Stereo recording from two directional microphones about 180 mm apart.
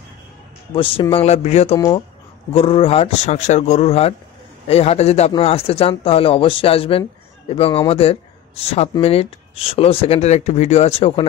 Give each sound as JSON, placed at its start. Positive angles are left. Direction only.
{"t": 1.1, "sound": "speech", "side_deg": 35}